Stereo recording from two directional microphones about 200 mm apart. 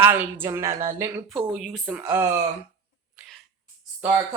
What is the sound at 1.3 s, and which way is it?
Speech, centre (ahead or behind).